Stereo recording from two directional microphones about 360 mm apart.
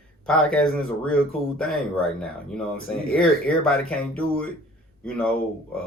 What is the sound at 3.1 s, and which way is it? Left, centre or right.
Speech, centre.